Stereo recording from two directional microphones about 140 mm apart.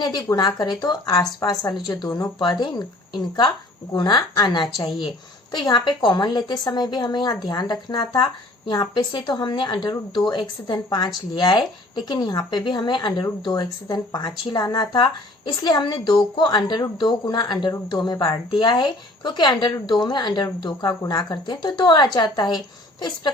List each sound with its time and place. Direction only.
0.0 s a woman's voice: 30° left (ahead or behind)
3.9 s a woman's voice: 30° left (ahead or behind)
5.6 s a woman's voice: 30° left (ahead or behind)